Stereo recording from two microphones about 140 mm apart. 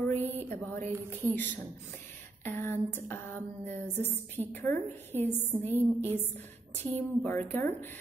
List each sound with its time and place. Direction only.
0.1 s a woman's voice: 15° left (ahead or behind)